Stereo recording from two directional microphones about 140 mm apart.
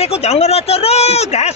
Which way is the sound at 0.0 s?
50° left (ahead or behind).